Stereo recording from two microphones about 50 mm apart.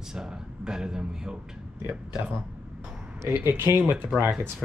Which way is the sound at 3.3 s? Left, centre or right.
Right.